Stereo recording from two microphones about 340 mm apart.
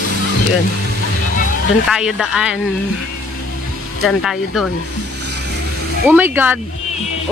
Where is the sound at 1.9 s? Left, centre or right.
Centre.